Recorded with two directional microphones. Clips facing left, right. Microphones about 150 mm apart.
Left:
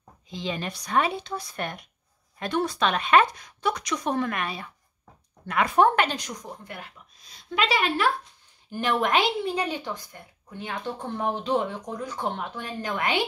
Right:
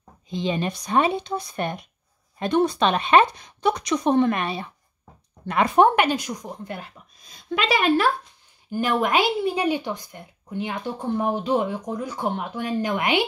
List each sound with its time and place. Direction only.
0.3 s speech: 20° right (ahead or behind)
5.9 s a woman's voice: 10° right (ahead or behind)
6.5 s speech: 30° right (ahead or behind)
7.6 s speech: 50° right (ahead or behind)
8.7 s a woman's voice: 5° right (ahead or behind)